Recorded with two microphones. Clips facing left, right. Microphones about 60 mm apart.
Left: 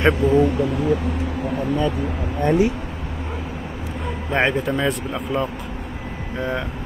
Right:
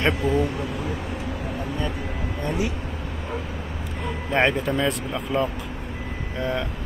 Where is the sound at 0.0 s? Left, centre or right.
Left.